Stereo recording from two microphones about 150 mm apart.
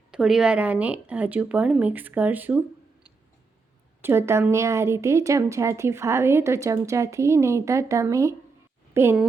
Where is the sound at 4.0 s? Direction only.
15° right (ahead or behind).